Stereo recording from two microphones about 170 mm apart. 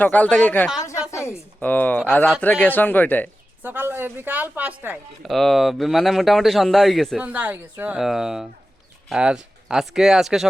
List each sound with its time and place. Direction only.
0.0 s speech: 10° left (ahead or behind)
1.1 s a sound: 15° left (ahead or behind)
1.6 s speech: 10° left (ahead or behind)
3.6 s speech: 10° right (ahead or behind)
5.3 s a man's voice: centre (ahead or behind)
7.3 s a man's voice: 10° right (ahead or behind)